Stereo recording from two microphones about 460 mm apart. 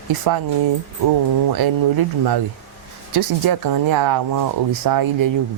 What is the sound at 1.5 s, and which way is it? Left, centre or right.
Speech, right.